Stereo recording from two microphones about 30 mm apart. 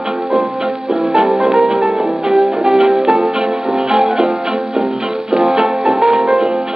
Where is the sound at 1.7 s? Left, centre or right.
Centre.